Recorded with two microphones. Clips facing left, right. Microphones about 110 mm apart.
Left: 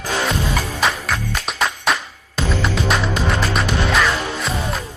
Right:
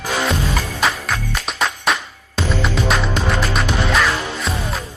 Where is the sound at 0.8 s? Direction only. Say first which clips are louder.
Right 1 dB; centre (ahead or behind).